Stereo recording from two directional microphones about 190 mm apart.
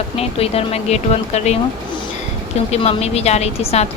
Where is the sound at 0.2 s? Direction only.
30° left (ahead or behind).